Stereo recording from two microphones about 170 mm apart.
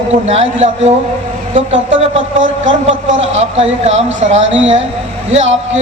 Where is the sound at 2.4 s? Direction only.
45° right (ahead or behind).